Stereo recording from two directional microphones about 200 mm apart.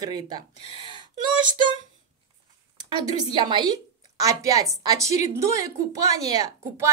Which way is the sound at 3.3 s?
20° right (ahead or behind).